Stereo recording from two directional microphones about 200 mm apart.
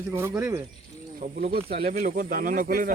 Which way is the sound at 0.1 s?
15° right (ahead or behind).